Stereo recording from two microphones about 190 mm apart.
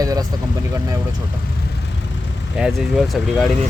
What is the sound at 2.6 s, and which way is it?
Speech, 5° right (ahead or behind).